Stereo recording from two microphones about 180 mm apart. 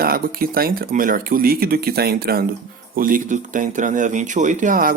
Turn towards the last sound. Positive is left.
turn(degrees=-50)  # may be behind; listen again after turning